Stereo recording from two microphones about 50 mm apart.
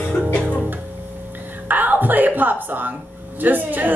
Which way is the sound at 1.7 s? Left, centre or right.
Right.